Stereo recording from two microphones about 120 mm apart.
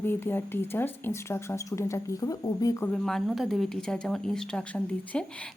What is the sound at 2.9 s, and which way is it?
Speech, 5° left (ahead or behind).